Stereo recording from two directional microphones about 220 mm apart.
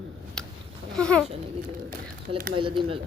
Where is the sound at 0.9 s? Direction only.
5° left (ahead or behind).